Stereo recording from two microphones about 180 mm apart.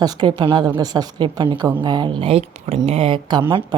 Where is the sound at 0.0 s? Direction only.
25° right (ahead or behind).